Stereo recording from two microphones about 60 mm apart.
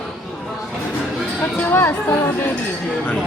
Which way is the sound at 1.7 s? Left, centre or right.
Left.